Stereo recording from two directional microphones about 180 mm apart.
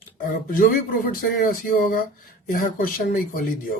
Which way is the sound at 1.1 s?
50° left (ahead or behind).